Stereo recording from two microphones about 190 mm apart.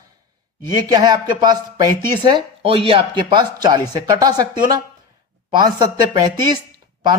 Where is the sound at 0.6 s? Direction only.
20° right (ahead or behind).